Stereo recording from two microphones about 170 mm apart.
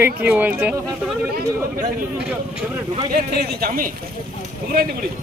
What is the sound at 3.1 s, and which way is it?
Speech, 60° right (ahead or behind).